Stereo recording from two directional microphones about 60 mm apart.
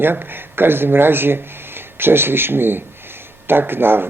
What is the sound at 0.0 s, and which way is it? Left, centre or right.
Speech, right.